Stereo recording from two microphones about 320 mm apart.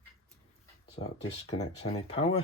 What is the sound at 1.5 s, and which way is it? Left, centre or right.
Speech, centre.